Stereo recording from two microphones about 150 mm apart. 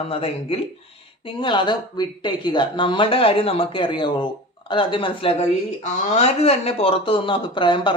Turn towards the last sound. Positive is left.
turn(degrees=30)  # may be behind; listen again after turning